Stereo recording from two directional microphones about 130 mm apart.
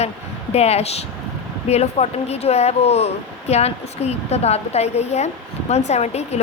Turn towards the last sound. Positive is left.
turn(degrees=55)  # may be behind; listen again after turning